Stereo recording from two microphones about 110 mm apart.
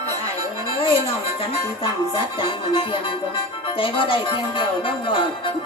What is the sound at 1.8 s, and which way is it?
Music, 55° left (ahead or behind).